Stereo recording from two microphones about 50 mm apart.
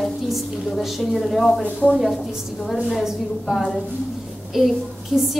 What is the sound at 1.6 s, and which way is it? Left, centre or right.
Speech, left.